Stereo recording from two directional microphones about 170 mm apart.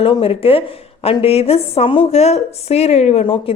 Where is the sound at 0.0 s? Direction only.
35° left (ahead or behind).